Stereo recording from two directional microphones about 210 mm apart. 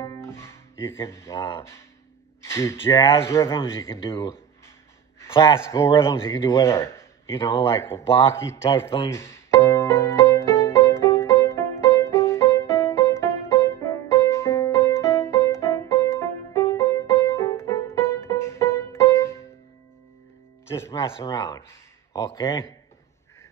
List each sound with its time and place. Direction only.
0.0 s music: 15° left (ahead or behind)
2.4 s speech: 10° left (ahead or behind)
9.1 s music: 10° left (ahead or behind)
20.6 s music: 10° left (ahead or behind)
21.0 s speech: 25° left (ahead or behind)